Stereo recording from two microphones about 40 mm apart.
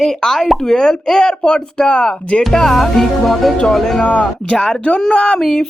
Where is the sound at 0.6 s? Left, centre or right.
Centre.